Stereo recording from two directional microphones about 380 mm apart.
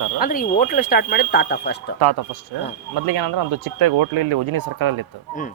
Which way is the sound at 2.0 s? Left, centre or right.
Right.